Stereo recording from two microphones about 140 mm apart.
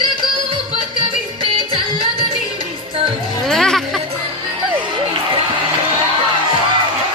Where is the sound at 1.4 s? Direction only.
40° right (ahead or behind).